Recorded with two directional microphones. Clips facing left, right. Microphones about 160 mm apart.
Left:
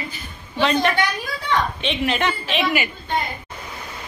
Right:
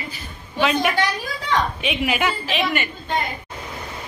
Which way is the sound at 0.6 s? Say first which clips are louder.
Left 1 dB; 5° right (ahead or behind).